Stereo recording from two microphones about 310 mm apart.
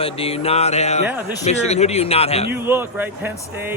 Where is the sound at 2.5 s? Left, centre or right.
Centre.